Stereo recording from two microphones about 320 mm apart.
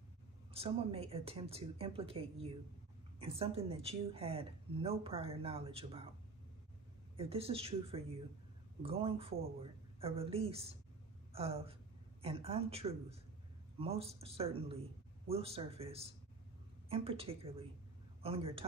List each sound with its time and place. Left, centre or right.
0.5 s a woman's voice: centre
7.2 s a woman's voice: centre